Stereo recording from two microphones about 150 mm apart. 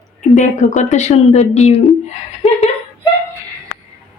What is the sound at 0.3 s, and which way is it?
A woman's voice, 55° left (ahead or behind).